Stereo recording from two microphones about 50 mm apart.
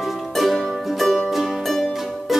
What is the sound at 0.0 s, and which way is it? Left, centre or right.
Music, centre.